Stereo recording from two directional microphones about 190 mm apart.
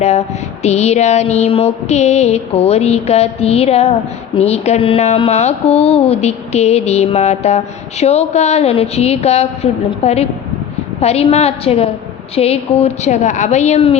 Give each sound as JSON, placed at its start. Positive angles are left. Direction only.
{"t": 0.6, "sound": "speech", "side_deg": 35}